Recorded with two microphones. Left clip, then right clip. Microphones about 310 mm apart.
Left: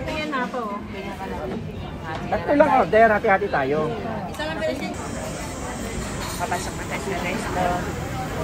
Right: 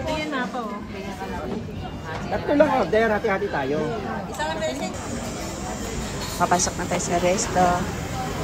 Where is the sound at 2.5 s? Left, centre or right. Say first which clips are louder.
Left 3 dB; centre.